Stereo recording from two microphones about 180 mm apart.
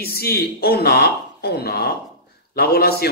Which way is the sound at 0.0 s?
60° left (ahead or behind).